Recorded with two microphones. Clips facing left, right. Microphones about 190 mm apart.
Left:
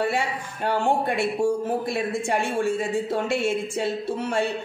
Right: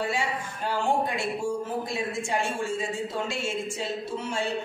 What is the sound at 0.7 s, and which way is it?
A woman's voice, 60° left (ahead or behind).